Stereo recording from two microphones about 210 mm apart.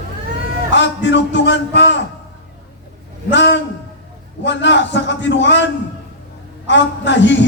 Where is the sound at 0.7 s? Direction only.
60° left (ahead or behind).